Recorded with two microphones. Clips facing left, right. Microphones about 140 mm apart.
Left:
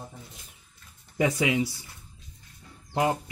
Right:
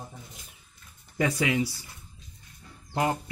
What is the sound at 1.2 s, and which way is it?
Speech, 20° left (ahead or behind).